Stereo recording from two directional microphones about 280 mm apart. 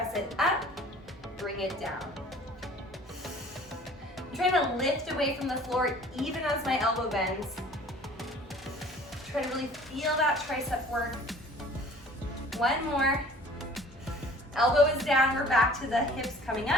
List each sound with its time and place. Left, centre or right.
0.1 s music: centre
4.4 s a woman's voice: centre
8.2 s music: centre
9.3 s a woman's voice: centre
12.5 s a woman's voice: centre
14.5 s a woman's voice: centre